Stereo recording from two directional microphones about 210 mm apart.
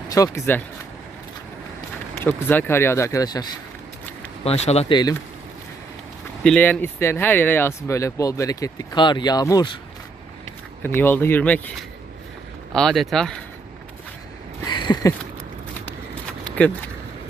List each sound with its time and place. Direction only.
0.1 s speech: 15° left (ahead or behind)
2.1 s speech: 10° left (ahead or behind)
4.4 s speech: 30° left (ahead or behind)
6.4 s speech: 5° left (ahead or behind)
10.8 s speech: 10° left (ahead or behind)
14.7 s a sound: 20° left (ahead or behind)